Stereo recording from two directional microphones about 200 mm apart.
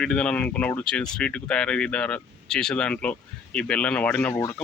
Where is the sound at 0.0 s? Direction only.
5° left (ahead or behind).